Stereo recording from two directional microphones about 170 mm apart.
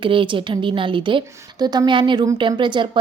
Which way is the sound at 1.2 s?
15° right (ahead or behind).